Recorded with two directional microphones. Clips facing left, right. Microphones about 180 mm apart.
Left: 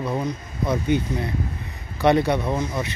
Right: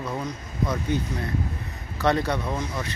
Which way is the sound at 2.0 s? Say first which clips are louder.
Left 5 dB; 15° left (ahead or behind).